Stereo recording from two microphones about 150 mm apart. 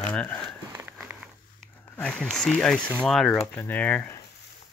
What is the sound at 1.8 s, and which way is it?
Speech, 10° left (ahead or behind).